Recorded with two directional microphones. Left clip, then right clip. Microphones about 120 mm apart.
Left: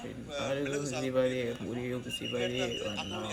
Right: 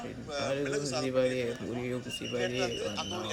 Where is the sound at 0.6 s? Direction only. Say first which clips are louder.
Right 2 dB; 30° right (ahead or behind).